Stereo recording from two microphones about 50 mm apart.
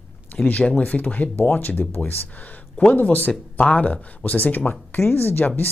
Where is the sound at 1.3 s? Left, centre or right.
Left.